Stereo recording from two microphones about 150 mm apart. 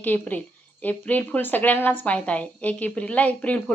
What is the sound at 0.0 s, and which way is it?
A woman's voice, 10° left (ahead or behind).